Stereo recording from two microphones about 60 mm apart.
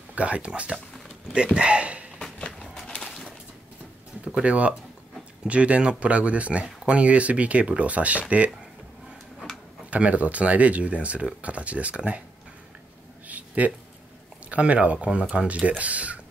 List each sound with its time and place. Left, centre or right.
0.1 s speech: right
2.1 s a sound: centre
2.6 s a sound: centre
2.9 s bird: centre
4.3 s speech: right
9.8 s speech: right
13.6 s speech: right